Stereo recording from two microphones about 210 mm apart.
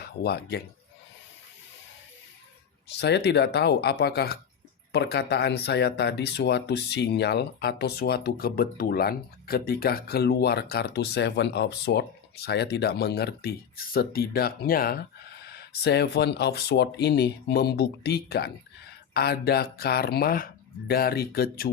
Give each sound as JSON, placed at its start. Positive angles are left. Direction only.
{"t": 0.0, "sound": "speech", "side_deg": 50}
{"t": 3.0, "sound": "speech", "side_deg": 55}